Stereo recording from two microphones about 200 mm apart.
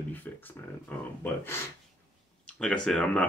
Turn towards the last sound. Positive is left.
turn(degrees=5)  # may be behind; listen again after turning